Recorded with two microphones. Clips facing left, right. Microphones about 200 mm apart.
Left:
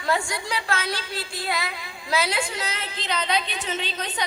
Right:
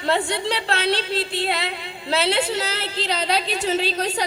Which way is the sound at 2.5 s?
35° right (ahead or behind).